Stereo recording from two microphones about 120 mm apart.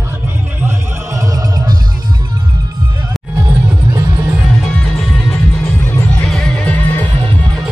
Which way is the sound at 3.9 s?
35° right (ahead or behind).